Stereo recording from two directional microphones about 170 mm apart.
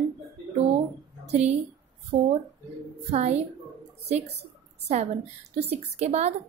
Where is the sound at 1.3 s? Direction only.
40° right (ahead or behind).